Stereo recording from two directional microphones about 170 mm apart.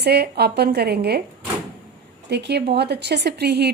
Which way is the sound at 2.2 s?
80° right.